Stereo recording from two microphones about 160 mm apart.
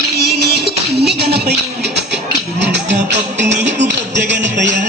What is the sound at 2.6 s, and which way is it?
Music, 90° right.